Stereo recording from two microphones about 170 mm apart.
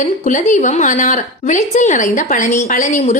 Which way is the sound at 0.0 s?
50° left (ahead or behind).